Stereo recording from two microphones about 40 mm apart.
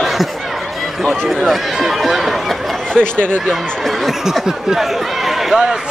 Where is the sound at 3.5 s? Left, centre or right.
Centre.